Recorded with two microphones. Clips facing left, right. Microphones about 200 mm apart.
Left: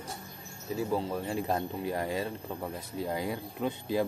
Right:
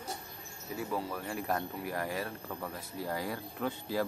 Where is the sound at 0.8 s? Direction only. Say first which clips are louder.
Left 5 dB; 25° left (ahead or behind).